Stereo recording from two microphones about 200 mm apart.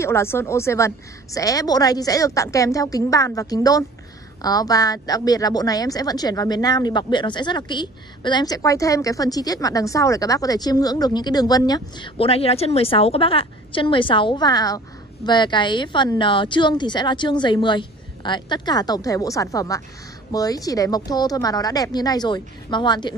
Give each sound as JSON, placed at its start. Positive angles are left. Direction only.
{"t": 0.0, "sound": "a woman's voice", "side_deg": 15}